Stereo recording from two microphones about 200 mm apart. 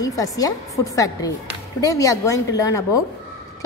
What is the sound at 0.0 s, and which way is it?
A woman's voice, 15° left (ahead or behind).